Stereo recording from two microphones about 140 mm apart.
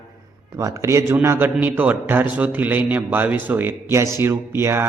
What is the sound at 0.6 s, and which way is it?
A man's voice, 20° right (ahead or behind).